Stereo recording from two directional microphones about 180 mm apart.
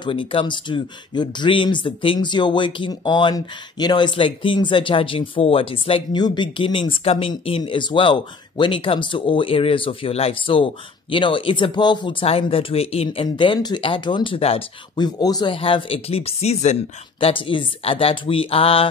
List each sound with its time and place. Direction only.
0.0 s speech: 30° left (ahead or behind)